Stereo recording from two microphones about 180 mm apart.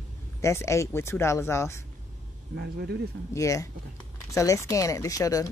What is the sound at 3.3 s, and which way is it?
Speech, 15° left (ahead or behind).